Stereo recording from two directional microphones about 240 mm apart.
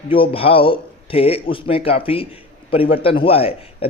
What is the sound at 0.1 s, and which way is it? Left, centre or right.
Speech, left.